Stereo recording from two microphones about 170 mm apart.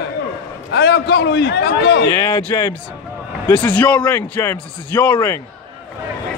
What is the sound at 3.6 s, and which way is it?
A man's voice, 10° left (ahead or behind).